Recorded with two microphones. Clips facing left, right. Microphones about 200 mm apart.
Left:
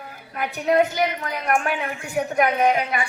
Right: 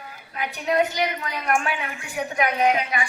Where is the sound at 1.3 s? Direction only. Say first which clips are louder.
Left 2 dB; 50° left (ahead or behind).